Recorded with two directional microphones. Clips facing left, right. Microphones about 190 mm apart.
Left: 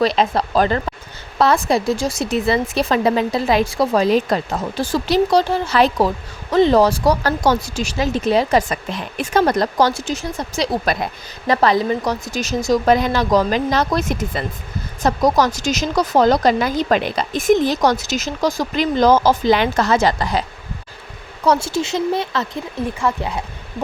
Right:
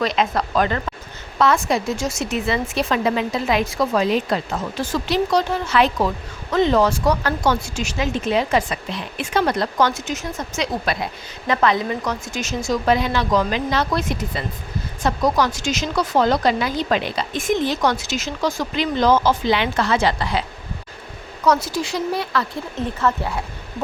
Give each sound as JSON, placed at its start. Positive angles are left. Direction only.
{"t": 0.0, "sound": "speech", "side_deg": 35}
{"t": 21.4, "sound": "speech", "side_deg": 30}